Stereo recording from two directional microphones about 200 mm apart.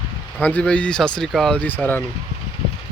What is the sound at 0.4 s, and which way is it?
Speech, 5° left (ahead or behind).